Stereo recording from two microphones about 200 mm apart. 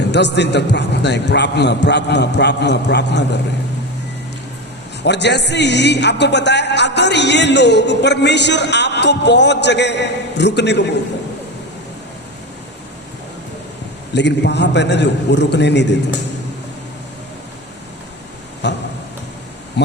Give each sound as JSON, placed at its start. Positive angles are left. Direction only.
{"t": 0.1, "sound": "a man's voice", "side_deg": 60}
{"t": 5.0, "sound": "a man's voice", "side_deg": 60}
{"t": 14.1, "sound": "a man's voice", "side_deg": 60}
{"t": 18.6, "sound": "a man's voice", "side_deg": 60}